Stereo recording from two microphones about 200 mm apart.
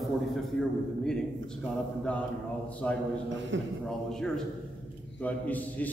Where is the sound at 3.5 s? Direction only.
65° right (ahead or behind).